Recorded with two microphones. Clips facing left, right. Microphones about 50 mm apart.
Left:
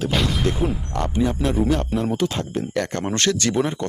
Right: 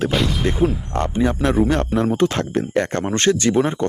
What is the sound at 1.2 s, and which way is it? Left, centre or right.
A man's voice, right.